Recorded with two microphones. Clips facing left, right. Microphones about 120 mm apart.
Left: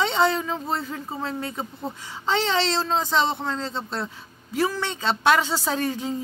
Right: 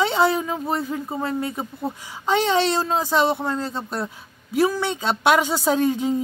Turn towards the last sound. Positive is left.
turn(degrees=-15)  # may be behind; listen again after turning